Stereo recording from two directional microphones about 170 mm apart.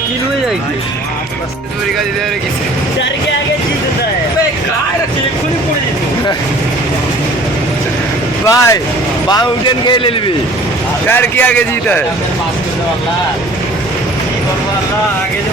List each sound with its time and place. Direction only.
8.4 s a man's voice: 20° left (ahead or behind)
11.1 s a man's voice: 10° left (ahead or behind)